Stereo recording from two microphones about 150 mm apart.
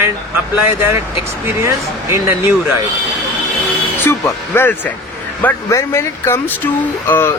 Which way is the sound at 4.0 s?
15° left (ahead or behind).